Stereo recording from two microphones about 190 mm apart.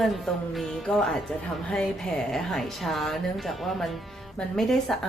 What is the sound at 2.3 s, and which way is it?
Speech, centre (ahead or behind).